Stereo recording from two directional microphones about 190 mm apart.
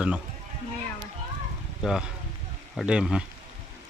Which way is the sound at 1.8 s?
Centre (ahead or behind).